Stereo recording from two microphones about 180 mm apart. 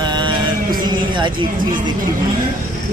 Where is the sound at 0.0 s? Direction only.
25° right (ahead or behind).